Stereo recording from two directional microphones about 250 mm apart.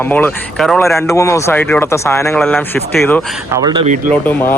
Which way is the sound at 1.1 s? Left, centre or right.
Centre.